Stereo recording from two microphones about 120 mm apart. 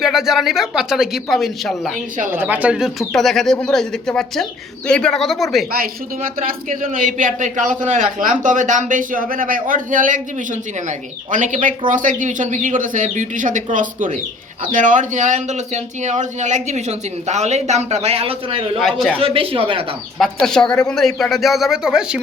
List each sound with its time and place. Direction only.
0.0 s speech: 5° right (ahead or behind)
2.3 s speech: 15° right (ahead or behind); by 5.6 s centre (ahead or behind)
6.8 s speech: 90° right; by 18.8 s 50° right (ahead or behind)
18.8 s speech: centre (ahead or behind)
19.2 s a woman's voice: 50° right (ahead or behind)
20.1 s speech: 5° left (ahead or behind)